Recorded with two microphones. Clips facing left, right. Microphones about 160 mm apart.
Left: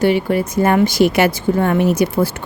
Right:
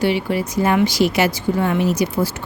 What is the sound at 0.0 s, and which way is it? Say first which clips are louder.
A woman's voice: left 4 dB; 50° left (ahead or behind).